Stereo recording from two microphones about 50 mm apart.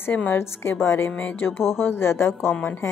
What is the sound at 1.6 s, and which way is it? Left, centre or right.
Speech, left.